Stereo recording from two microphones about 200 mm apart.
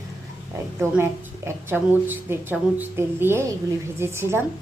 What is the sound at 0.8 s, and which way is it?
A woman's voice, 15° right (ahead or behind).